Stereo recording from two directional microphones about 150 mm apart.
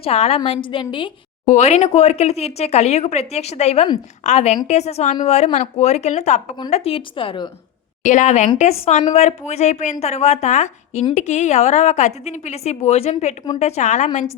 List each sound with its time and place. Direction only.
0.0 s a woman's voice: 45° left (ahead or behind)
1.5 s a woman's voice: 50° left (ahead or behind); by 7.5 s 35° left (ahead or behind)
8.0 s a woman's voice: 55° left (ahead or behind)